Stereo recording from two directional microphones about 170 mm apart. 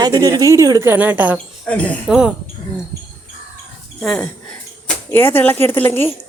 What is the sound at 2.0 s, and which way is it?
Speech, 5° right (ahead or behind).